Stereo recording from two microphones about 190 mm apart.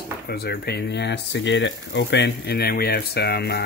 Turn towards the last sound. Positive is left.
turn(degrees=60)  # may be behind; listen again after turning